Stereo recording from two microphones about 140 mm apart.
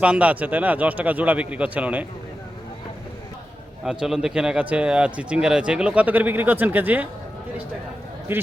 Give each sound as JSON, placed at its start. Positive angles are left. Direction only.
{"t": 0.0, "sound": "a man's voice", "side_deg": -10}
{"t": 3.8, "sound": "a man's voice", "side_deg": -5}